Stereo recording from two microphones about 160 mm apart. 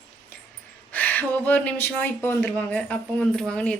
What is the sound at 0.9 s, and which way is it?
Speech, 10° left (ahead or behind).